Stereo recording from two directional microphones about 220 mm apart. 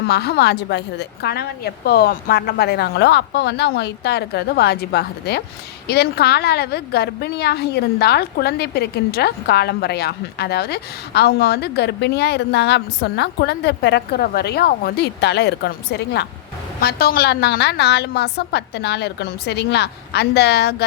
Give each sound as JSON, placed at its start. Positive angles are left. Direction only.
{"t": 0.1, "sound": "a woman's voice", "side_deg": 45}